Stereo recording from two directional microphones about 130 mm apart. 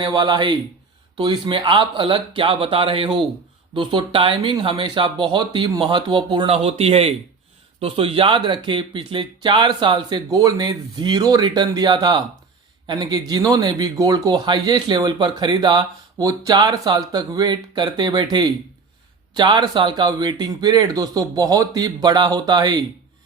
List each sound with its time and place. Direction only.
0.0 s speech: 35° right (ahead or behind)